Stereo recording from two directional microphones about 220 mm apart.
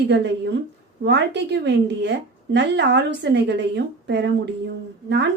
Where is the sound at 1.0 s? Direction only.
50° right (ahead or behind).